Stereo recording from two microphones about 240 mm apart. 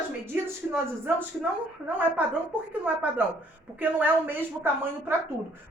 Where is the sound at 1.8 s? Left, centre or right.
Centre.